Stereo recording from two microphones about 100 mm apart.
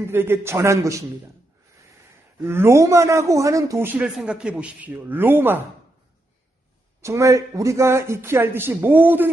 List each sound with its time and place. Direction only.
0.0 s a man's voice: 25° right (ahead or behind)
2.4 s a man's voice: 25° right (ahead or behind)
3.8 s a man's voice: 15° right (ahead or behind)
4.1 s a man's voice: 5° right (ahead or behind); by 5.6 s 20° right (ahead or behind)
7.0 s a man's voice: 30° right (ahead or behind)